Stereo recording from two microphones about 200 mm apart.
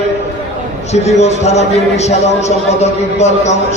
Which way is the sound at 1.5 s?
35° left (ahead or behind).